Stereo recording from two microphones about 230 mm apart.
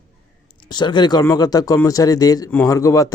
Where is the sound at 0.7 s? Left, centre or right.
Centre.